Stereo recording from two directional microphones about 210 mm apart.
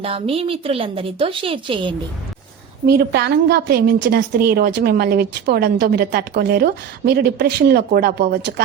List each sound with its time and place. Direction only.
0.0 s a woman's voice: 25° right (ahead or behind)
2.8 s a woman's voice: 50° right (ahead or behind)